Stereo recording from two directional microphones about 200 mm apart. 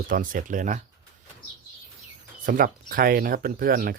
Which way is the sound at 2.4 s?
45° right (ahead or behind).